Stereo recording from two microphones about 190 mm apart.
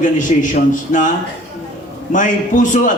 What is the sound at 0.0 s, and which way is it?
A man's voice, 45° left (ahead or behind).